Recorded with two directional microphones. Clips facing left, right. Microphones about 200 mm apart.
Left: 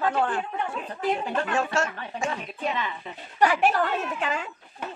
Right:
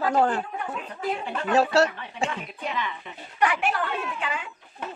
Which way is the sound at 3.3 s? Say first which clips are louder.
Left 3 dB; 40° left (ahead or behind).